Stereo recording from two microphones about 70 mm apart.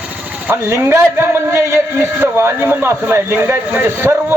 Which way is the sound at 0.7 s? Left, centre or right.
Right.